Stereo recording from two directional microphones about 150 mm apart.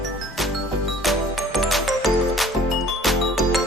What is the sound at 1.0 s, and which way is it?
Music, centre (ahead or behind).